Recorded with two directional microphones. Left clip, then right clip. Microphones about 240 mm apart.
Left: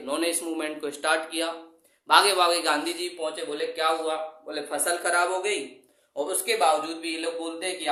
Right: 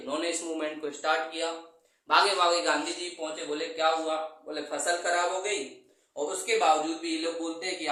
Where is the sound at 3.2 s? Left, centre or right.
Left.